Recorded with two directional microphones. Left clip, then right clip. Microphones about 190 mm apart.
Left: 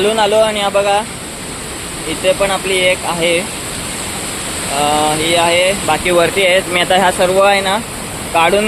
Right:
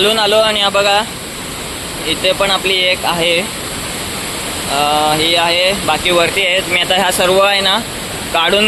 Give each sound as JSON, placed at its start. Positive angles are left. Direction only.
{"t": 0.0, "sound": "speech", "side_deg": 10}
{"t": 2.2, "sound": "speech", "side_deg": 0}
{"t": 4.8, "sound": "speech", "side_deg": 0}
{"t": 6.1, "sound": "speech", "side_deg": 20}
{"t": 7.2, "sound": "speech", "side_deg": 0}